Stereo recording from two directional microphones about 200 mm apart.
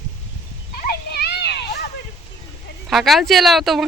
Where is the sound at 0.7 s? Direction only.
50° left (ahead or behind).